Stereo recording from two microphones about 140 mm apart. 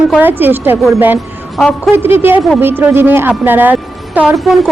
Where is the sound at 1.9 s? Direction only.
15° right (ahead or behind).